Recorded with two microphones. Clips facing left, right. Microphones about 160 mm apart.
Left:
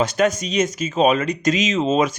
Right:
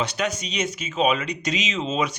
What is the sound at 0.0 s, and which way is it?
Speech, 45° left (ahead or behind).